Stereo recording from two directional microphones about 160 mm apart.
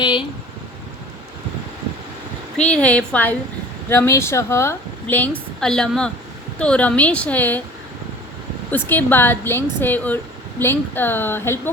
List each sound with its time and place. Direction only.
0.0 s a sound: 30° left (ahead or behind)
2.6 s a woman's voice: 10° left (ahead or behind)
8.7 s speech: 10° left (ahead or behind)